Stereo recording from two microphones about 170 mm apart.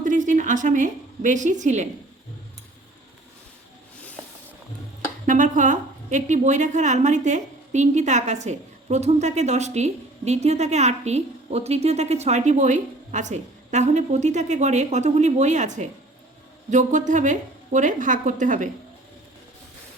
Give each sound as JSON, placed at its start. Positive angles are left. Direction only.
{"t": 0.0, "sound": "a woman's voice", "side_deg": -50}
{"t": 5.2, "sound": "a woman's voice", "side_deg": -50}